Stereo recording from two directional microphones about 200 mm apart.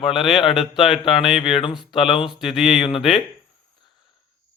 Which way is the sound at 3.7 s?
25° left (ahead or behind).